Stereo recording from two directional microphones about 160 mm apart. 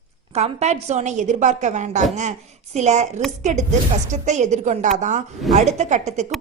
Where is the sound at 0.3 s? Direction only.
45° right (ahead or behind).